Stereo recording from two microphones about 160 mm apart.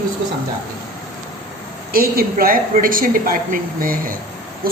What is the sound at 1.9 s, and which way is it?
A woman's voice, 60° right (ahead or behind).